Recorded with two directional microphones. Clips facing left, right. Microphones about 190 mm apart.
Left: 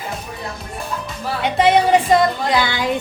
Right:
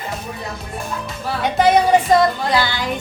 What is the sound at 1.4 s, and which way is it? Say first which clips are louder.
Speech: even; 25° left (ahead or behind).